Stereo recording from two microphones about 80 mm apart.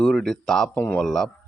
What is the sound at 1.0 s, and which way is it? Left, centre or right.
Speech, centre.